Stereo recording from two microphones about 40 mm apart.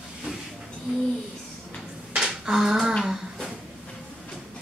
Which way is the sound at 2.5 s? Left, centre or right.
Centre.